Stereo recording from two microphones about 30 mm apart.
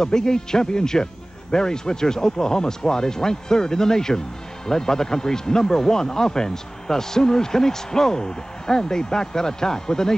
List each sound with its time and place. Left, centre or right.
0.0 s speech: left